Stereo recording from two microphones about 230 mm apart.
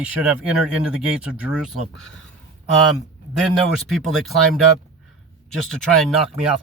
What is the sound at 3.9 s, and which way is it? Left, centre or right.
Speech, centre.